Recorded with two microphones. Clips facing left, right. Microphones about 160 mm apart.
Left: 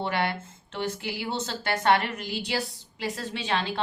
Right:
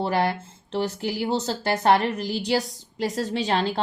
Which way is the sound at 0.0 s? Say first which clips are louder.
Right 5 dB; 35° right (ahead or behind).